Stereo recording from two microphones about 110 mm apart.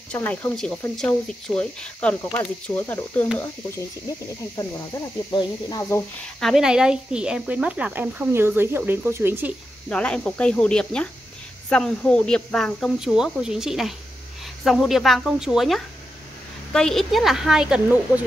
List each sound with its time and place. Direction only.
0.1 s speech: 15° left (ahead or behind)
4.6 s speech: 25° left (ahead or behind)
6.4 s speech: 5° right (ahead or behind)
9.8 s speech: 10° left (ahead or behind); by 18.2 s 10° right (ahead or behind)